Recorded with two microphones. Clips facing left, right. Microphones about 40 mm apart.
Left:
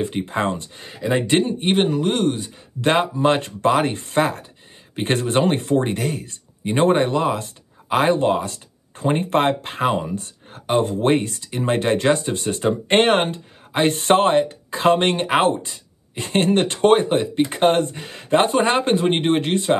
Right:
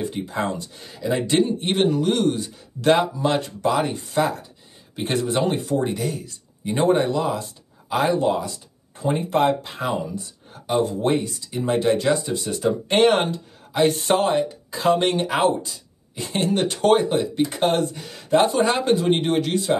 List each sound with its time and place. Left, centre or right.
0.0 s speech: left; by 2.9 s centre
2.9 s speech: left